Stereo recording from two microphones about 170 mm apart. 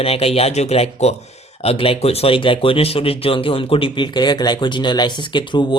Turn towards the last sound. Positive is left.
turn(degrees=25)  # may be behind; listen again after turning